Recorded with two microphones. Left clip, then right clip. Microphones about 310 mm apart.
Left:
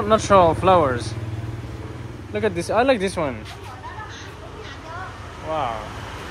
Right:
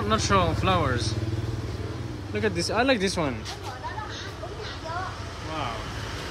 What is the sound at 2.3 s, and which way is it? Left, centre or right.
Speech, centre.